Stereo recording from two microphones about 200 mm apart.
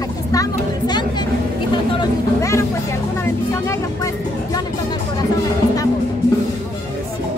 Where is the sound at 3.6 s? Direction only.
15° left (ahead or behind).